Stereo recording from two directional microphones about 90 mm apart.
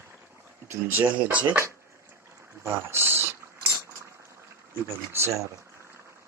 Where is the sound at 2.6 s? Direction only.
30° right (ahead or behind).